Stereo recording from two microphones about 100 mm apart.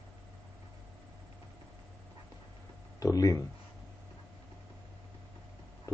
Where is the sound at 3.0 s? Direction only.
35° left (ahead or behind).